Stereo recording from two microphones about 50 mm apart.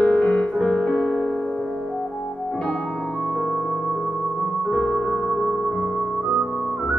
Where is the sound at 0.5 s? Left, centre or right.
Centre.